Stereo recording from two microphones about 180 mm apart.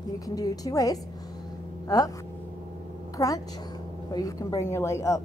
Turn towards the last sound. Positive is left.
turn(degrees=15)  # may be behind; listen again after turning